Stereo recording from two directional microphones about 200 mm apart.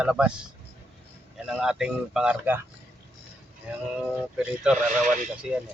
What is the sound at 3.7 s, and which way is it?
Speech, 5° right (ahead or behind).